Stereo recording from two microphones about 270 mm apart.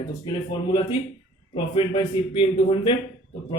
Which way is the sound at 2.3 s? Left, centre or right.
Centre.